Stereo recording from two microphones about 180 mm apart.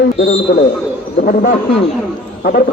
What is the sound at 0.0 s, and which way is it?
Speech, 80° left.